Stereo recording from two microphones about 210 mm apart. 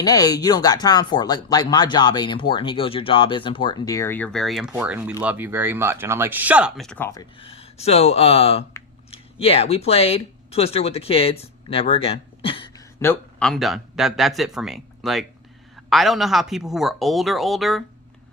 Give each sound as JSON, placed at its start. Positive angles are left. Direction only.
{"t": 0.0, "sound": "speech", "side_deg": 15}
{"t": 13.5, "sound": "speech", "side_deg": 0}